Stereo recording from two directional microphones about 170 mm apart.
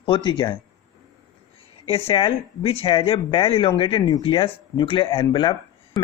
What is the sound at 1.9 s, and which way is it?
Speech, 35° left (ahead or behind).